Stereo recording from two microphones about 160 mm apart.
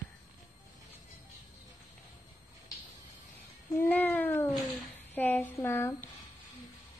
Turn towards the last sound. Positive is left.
turn(degrees=15)  # may be behind; listen again after turning